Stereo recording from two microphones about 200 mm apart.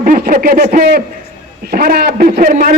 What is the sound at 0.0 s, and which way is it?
A man's voice, 45° right (ahead or behind).